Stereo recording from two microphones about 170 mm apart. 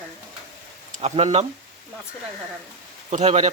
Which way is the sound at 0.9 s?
40° right (ahead or behind).